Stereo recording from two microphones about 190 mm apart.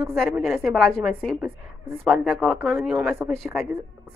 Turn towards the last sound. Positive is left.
turn(degrees=0)  # may be behind; listen again after turning